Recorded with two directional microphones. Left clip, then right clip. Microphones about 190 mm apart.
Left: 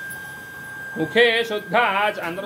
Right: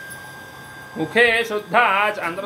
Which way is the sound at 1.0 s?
15° right (ahead or behind).